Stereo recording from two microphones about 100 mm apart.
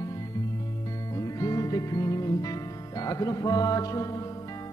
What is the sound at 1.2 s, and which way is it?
Music, 35° left (ahead or behind).